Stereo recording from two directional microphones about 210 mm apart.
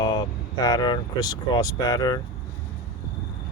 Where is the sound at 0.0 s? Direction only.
20° left (ahead or behind).